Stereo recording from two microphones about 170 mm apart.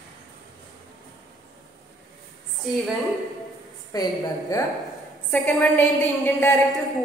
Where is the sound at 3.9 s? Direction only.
20° left (ahead or behind).